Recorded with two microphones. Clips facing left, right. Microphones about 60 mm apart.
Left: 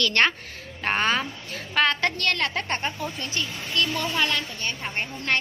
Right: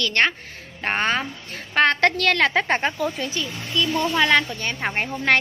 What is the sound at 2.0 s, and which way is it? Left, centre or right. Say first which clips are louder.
A woman's voice: right 6 dB; right.